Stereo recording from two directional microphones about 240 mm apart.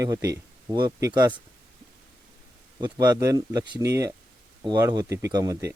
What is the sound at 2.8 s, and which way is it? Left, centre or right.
Speech, centre.